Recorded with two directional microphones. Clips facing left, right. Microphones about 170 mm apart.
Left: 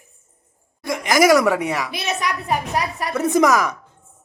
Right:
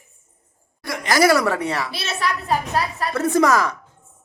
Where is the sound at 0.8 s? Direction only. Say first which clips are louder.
Left 1 dB; 20° left (ahead or behind).